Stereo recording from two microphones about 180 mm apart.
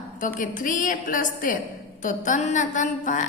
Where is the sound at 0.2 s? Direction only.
50° left (ahead or behind).